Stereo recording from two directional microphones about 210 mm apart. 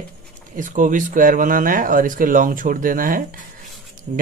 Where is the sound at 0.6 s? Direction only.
40° right (ahead or behind).